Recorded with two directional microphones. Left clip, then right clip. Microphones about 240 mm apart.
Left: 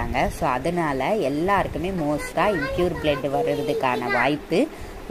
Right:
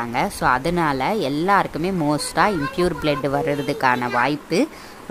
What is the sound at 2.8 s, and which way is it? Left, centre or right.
Speech, right.